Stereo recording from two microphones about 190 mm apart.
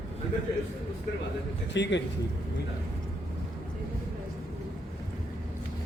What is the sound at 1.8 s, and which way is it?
Speech, 70° left (ahead or behind).